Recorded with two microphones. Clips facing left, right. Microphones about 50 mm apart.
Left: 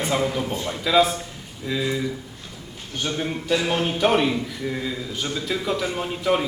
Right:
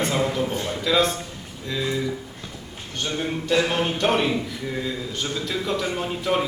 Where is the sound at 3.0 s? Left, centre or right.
Centre.